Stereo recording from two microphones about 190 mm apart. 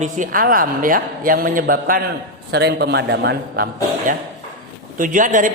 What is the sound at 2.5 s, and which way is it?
A man's voice, 60° right (ahead or behind).